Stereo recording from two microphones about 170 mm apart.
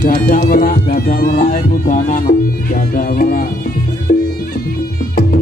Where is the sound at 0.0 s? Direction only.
50° left (ahead or behind).